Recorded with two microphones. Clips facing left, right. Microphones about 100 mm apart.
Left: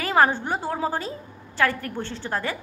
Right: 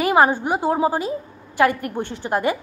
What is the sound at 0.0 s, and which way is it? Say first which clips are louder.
A woman's voice: right 4 dB; 15° right (ahead or behind).